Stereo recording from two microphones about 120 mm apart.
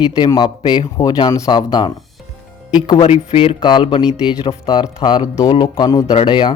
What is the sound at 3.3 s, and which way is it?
Speech, 50° left (ahead or behind).